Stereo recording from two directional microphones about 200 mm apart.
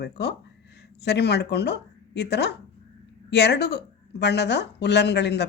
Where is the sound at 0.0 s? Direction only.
60° left (ahead or behind).